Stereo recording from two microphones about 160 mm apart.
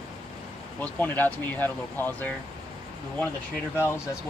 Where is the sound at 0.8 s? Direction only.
10° left (ahead or behind).